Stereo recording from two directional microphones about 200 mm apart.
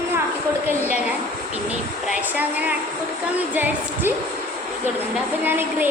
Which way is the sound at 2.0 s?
10° right (ahead or behind).